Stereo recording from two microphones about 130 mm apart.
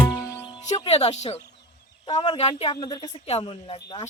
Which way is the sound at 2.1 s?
50° left (ahead or behind).